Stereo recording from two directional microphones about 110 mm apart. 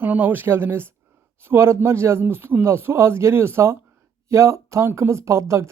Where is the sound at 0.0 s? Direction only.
15° right (ahead or behind).